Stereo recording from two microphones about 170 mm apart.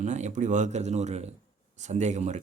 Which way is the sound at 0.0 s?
45° right (ahead or behind).